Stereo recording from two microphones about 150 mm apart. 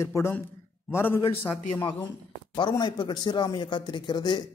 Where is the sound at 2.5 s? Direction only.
30° left (ahead or behind).